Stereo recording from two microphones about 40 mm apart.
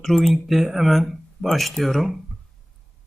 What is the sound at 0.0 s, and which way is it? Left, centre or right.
Speech, centre.